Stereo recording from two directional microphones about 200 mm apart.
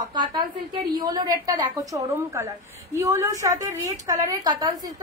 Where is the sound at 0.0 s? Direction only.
20° right (ahead or behind).